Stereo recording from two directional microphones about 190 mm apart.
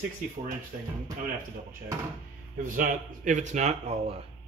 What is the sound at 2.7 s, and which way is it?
A man's voice, 45° right (ahead or behind).